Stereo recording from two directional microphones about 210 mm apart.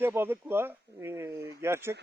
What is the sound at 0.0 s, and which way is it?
Speech, 10° right (ahead or behind).